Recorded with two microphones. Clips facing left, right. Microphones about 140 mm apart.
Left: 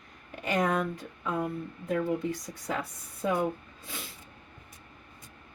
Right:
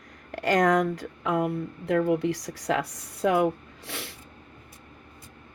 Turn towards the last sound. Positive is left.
turn(degrees=-75)  # may be behind; listen again after turning